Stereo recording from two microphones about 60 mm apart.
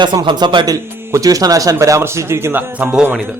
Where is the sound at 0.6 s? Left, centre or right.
Right.